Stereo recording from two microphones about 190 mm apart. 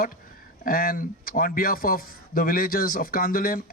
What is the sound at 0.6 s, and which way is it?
Speech, 50° left (ahead or behind).